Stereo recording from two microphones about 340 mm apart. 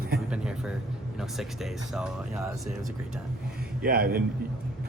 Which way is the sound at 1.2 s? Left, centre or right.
Centre.